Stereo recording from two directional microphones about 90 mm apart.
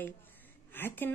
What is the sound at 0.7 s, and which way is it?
Speech, 20° left (ahead or behind).